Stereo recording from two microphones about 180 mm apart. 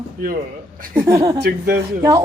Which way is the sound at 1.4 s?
60° right (ahead or behind).